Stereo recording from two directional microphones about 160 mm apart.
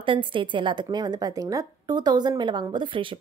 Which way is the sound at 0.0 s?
30° right (ahead or behind).